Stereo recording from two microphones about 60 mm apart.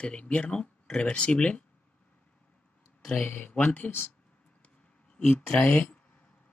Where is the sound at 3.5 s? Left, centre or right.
Left.